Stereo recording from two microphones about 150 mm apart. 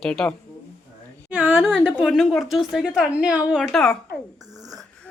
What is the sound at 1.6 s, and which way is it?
A woman's voice, 5° left (ahead or behind).